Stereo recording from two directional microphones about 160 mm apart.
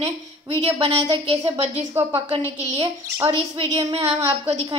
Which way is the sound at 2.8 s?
25° right (ahead or behind).